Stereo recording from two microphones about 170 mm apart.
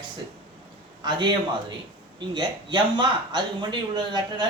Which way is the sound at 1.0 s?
25° right (ahead or behind).